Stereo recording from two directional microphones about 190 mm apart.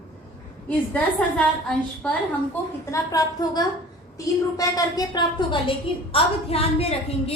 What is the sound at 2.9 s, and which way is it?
A woman's voice, 20° left (ahead or behind).